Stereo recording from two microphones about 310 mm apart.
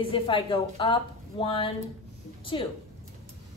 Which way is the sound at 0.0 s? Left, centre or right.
Centre.